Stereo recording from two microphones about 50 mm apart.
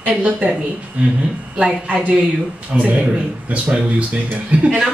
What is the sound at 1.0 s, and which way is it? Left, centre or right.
Speech, right.